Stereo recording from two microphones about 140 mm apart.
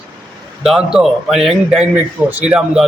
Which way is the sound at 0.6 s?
5° right (ahead or behind).